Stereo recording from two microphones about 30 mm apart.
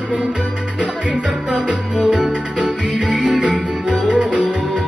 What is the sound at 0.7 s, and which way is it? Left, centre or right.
Music, right.